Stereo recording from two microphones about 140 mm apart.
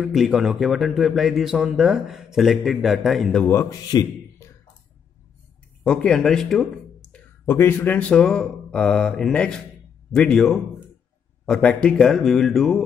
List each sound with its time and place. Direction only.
0.0 s a man's voice: 5° right (ahead or behind)
3.4 s a man's voice: 20° left (ahead or behind)
5.9 s speech: 5° left (ahead or behind)
7.4 s a man's voice: 15° left (ahead or behind)